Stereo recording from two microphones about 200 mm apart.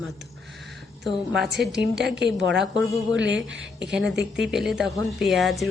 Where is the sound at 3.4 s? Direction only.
65° right (ahead or behind).